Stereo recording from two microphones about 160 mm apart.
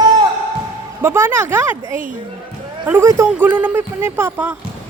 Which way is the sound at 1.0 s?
15° right (ahead or behind).